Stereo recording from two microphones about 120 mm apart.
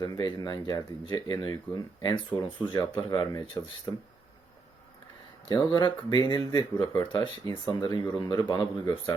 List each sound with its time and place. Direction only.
0.0 s speech: 30° left (ahead or behind)
5.5 s speech: 40° left (ahead or behind)